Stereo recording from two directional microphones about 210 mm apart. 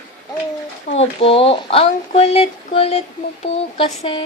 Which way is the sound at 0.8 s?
30° left (ahead or behind).